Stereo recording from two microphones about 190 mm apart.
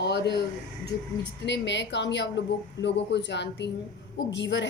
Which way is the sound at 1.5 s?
70° left (ahead or behind).